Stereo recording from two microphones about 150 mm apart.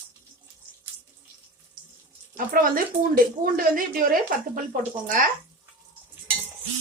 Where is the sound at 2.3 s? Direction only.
70° right (ahead or behind).